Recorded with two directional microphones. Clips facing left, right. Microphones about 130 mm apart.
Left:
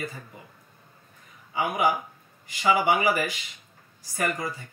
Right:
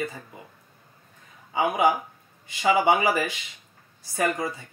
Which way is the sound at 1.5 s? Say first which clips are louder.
Right 3 dB; 25° right (ahead or behind).